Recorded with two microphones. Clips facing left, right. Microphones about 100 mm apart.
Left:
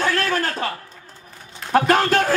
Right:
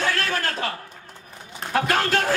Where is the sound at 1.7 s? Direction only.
40° left (ahead or behind).